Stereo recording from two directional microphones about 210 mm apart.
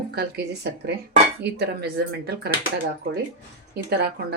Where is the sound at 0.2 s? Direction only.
50° right (ahead or behind).